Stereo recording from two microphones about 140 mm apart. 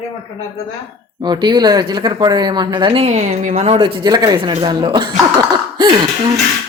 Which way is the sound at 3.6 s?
40° right (ahead or behind).